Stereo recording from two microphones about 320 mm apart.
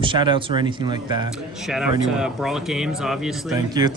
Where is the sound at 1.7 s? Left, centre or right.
Centre.